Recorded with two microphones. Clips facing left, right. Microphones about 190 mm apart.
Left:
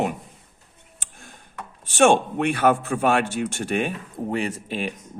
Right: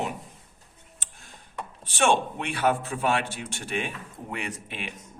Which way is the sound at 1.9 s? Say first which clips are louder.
Left 6 dB; 45° left (ahead or behind).